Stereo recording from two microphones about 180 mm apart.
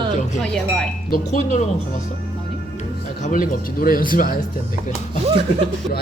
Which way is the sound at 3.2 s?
50° left (ahead or behind).